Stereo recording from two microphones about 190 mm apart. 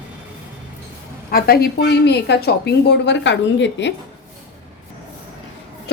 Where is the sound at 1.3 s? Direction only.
55° left (ahead or behind); by 3.9 s 70° left (ahead or behind).